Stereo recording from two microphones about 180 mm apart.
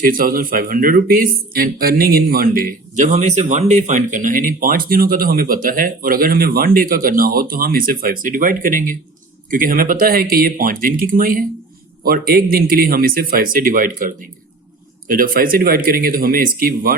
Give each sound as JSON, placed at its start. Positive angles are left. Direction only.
{"t": 0.1, "sound": "a man's voice", "side_deg": -50}